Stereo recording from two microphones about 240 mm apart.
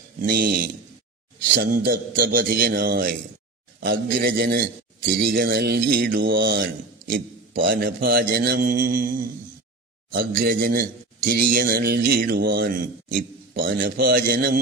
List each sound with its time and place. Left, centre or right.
0.2 s a man's voice: right